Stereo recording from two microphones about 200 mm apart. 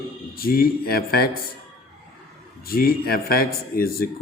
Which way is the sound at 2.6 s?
50° left (ahead or behind).